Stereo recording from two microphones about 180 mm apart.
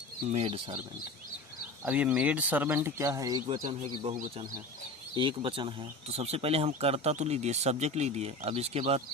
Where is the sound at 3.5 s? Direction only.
30° right (ahead or behind).